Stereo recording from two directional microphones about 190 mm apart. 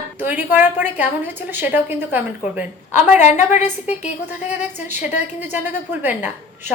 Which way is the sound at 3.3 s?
35° left (ahead or behind).